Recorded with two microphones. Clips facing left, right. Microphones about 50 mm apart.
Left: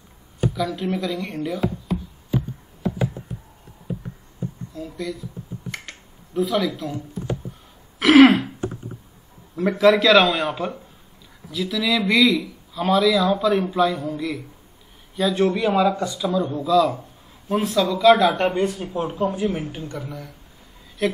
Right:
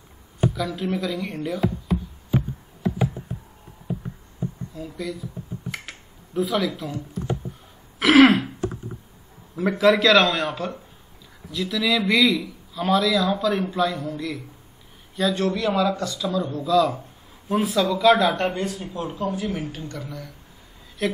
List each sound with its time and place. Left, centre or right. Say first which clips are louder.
0.6 s a man's voice: left 2 dB; centre
2.8 s a sound: even; centre
4.7 s a man's voice: left 3 dB; centre
5.7 s finger snapping: even; centre
8.0 s throat clearing: left 2 dB; centre
9.6 s a man's voice: left 2 dB; centre
15.4 s a man's voice: left 5 dB; centre
18.6 s a man's voice: left 5 dB; left
19.1 s speech: left 3 dB; left
20.0 s a man's voice: left 2 dB; centre